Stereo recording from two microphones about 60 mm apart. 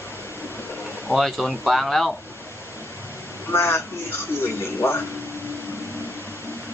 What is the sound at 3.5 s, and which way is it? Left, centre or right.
A man's voice, left.